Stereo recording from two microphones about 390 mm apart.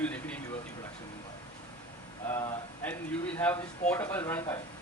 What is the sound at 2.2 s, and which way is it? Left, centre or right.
A man's voice, centre.